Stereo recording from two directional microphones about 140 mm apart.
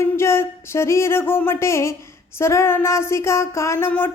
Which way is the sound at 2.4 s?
20° left (ahead or behind).